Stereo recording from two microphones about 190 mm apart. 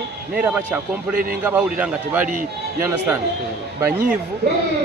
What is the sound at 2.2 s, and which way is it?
Speech, 45° right (ahead or behind).